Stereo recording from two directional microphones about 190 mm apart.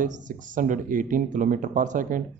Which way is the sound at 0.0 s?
40° right (ahead or behind).